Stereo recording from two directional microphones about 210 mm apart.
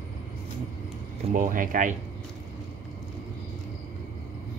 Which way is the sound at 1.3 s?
40° right (ahead or behind).